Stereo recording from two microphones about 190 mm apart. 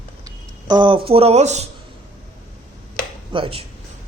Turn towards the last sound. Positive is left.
turn(degrees=-30)  # may be behind; listen again after turning